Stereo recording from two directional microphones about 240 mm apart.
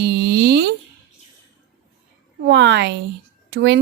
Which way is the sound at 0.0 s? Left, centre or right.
Right.